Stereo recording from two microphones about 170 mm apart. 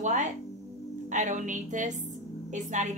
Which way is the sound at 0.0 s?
45° right (ahead or behind).